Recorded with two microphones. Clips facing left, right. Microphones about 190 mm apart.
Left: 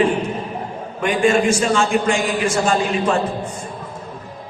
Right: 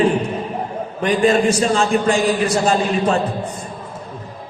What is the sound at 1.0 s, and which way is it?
A man's voice, 35° right (ahead or behind).